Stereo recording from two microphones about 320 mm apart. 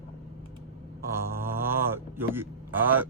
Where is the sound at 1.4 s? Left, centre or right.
Centre.